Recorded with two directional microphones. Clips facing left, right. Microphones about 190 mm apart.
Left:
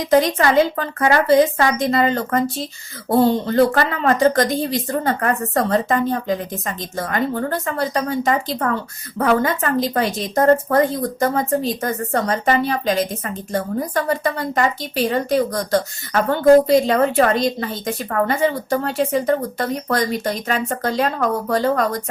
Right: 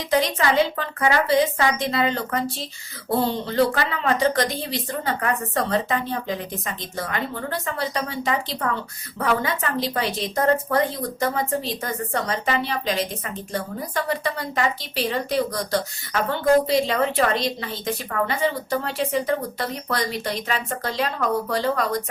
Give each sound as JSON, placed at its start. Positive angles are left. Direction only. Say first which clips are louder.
{"t": 0.1, "sound": "a woman's voice", "louder": "left 5 dB", "side_deg": 45}